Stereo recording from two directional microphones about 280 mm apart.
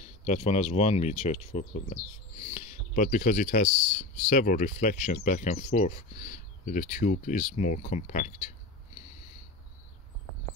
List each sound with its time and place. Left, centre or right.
0.2 s speech: left